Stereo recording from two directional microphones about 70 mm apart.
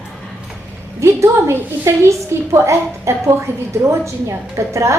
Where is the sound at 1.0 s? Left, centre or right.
Right.